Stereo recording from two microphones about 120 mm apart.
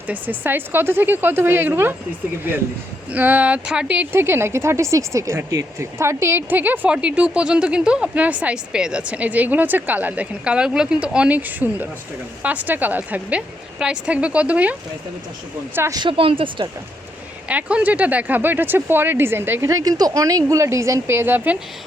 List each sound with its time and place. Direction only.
0.1 s speech: 15° right (ahead or behind)
3.1 s speech: 15° right (ahead or behind)
16.0 s a woman's voice: 45° right (ahead or behind)
17.5 s speech: 10° right (ahead or behind)